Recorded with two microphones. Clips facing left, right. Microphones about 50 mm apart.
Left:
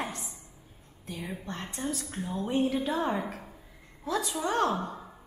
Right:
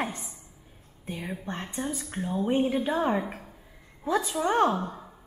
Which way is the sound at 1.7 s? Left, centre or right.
Centre.